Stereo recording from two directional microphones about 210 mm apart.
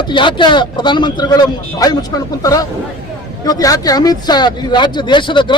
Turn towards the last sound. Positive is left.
turn(degrees=20)  # may be behind; listen again after turning